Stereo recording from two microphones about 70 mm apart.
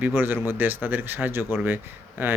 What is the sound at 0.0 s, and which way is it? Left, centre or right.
Speech, right.